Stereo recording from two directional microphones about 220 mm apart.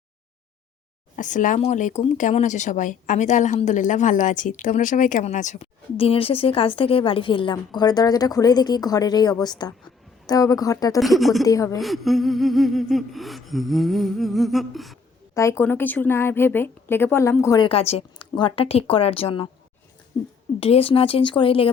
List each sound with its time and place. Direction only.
1.1 s speech: 35° left (ahead or behind); by 11.0 s 15° left (ahead or behind)
11.0 s gasp: centre (ahead or behind)
11.4 s speech: 15° left (ahead or behind)
11.8 s gasp: centre (ahead or behind)
15.4 s speech: 10° left (ahead or behind)
17.7 s speech: 25° left (ahead or behind)
20.6 s speech: 25° left (ahead or behind)